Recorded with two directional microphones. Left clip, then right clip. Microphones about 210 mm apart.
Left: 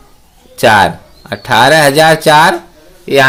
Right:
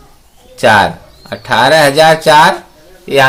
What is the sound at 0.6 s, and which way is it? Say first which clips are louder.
Speech: left 1 dB; 40° left (ahead or behind).